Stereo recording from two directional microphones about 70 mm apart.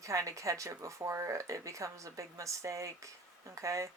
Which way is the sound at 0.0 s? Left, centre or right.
Right.